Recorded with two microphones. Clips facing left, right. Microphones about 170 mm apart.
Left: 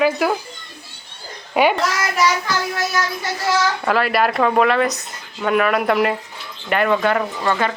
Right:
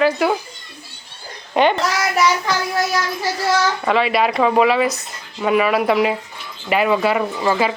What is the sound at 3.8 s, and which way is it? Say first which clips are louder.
A woman's voice: right 1 dB; centre (ahead or behind).